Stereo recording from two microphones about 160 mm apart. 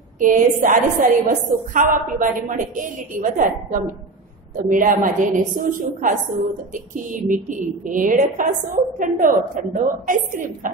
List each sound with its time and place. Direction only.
0.2 s a woman's voice: 55° right (ahead or behind)